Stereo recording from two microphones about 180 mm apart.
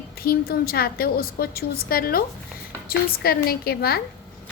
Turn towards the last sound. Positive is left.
turn(degrees=60)  # may be behind; listen again after turning